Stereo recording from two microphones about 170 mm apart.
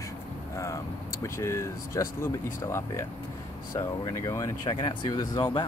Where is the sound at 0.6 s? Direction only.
15° left (ahead or behind).